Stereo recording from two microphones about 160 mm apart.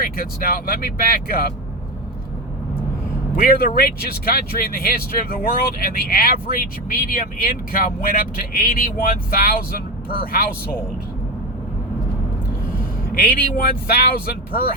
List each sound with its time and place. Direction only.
0.0 s speech: 65° left (ahead or behind)
3.3 s speech: 65° left (ahead or behind)
13.1 s speech: 65° left (ahead or behind)